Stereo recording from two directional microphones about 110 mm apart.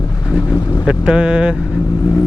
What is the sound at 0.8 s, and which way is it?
Speech, 10° right (ahead or behind).